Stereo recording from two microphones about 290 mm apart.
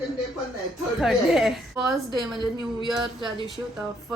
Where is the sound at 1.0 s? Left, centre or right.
Centre.